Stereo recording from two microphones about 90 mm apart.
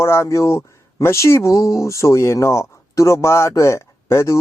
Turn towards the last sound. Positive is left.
turn(degrees=30)  # may be behind; listen again after turning